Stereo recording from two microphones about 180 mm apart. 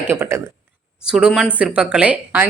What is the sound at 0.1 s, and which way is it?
Speech, 15° right (ahead or behind).